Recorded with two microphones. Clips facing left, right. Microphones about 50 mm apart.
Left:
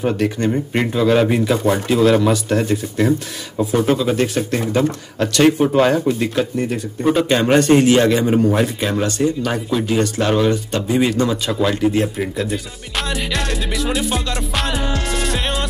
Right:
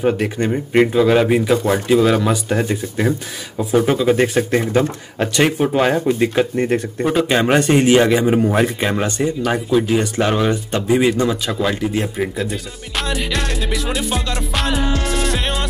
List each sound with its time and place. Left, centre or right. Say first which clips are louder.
0.0 s speech: even; centre
3.7 s speech: right 3 dB; centre
6.5 s speech: right 3 dB; right
7.1 s speech: left 1 dB; centre
9.4 s speech: right 3 dB; centre